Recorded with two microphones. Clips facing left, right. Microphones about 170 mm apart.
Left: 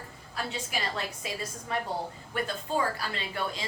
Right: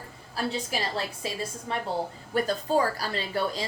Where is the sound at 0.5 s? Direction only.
35° right (ahead or behind).